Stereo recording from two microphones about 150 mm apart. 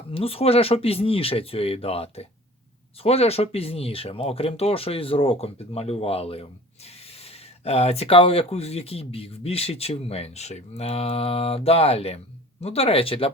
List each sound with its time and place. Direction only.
0.1 s speech: 40° left (ahead or behind)